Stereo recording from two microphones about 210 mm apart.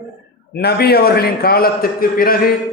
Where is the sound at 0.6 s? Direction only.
50° left (ahead or behind).